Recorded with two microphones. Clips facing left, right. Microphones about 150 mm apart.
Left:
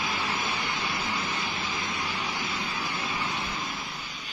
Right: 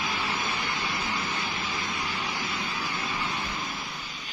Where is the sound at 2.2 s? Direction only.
5° left (ahead or behind).